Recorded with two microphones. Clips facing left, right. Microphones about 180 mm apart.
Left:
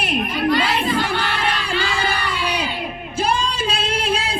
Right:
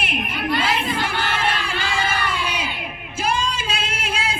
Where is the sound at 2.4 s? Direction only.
35° left (ahead or behind).